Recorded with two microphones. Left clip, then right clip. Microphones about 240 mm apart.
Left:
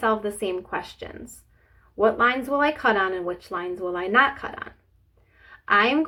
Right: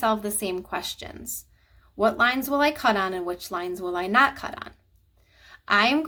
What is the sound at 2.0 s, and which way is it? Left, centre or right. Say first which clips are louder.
Speech: left 1 dB; right.